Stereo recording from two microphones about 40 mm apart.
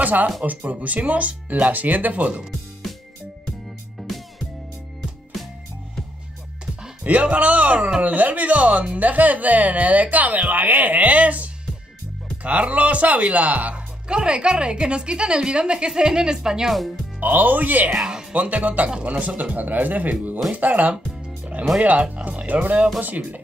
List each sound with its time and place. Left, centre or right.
0.0 s speech: right
4.0 s music: centre
7.0 s speech: right
14.0 s a woman's voice: right
17.2 s speech: right
17.9 s speech: centre
18.3 s speech: right
22.5 s speech: right